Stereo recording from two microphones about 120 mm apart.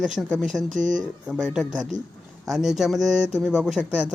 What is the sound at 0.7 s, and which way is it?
Speech, 90° right.